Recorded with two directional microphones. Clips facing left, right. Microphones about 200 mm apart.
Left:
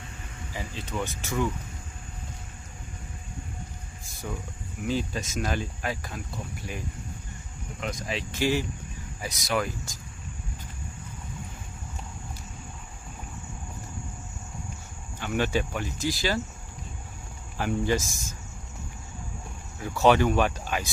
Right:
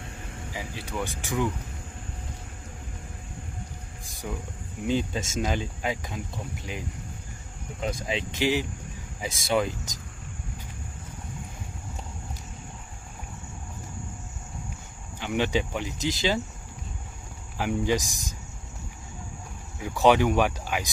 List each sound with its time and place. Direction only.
0.5 s speech: 10° right (ahead or behind)
4.1 s music: 15° right (ahead or behind)
4.8 s speech: 25° right (ahead or behind)
7.8 s speech: 30° right (ahead or behind)
8.3 s speech: 15° right (ahead or behind)
15.1 s speech: 15° right (ahead or behind)
17.6 s speech: 15° right (ahead or behind)
19.8 s speech: 15° right (ahead or behind)